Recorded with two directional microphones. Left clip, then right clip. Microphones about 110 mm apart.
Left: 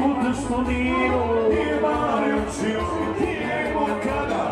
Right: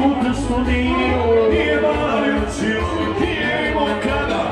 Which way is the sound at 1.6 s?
15° left (ahead or behind).